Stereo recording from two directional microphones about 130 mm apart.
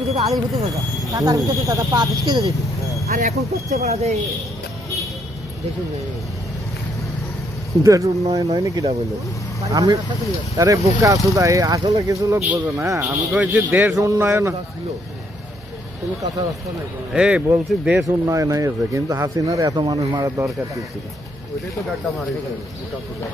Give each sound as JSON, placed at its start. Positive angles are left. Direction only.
{"t": 0.1, "sound": "speech", "side_deg": -55}
{"t": 1.1, "sound": "speech", "side_deg": -25}
{"t": 3.1, "sound": "speech", "side_deg": -65}
{"t": 3.7, "sound": "speech", "side_deg": -55}
{"t": 7.8, "sound": "speech", "side_deg": -25}
{"t": 13.3, "sound": "a man's voice", "side_deg": -10}
{"t": 17.1, "sound": "a man's voice", "side_deg": -5}
{"t": 18.0, "sound": "speech", "side_deg": -25}